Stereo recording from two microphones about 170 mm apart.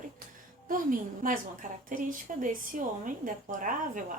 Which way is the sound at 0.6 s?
50° right (ahead or behind).